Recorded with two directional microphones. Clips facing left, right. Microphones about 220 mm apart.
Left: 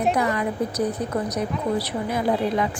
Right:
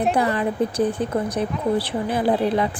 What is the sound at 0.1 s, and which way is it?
A woman's voice, 30° right (ahead or behind).